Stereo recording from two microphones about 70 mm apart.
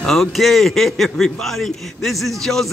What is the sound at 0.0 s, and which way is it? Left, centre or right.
A man's voice, centre.